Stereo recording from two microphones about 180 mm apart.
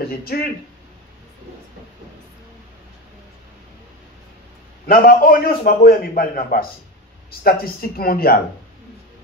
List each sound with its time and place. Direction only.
0.0 s speech: 55° left (ahead or behind)
4.8 s speech: 55° left (ahead or behind)